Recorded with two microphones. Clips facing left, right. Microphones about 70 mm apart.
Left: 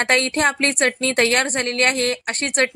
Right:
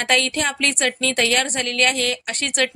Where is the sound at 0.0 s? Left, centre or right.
Left.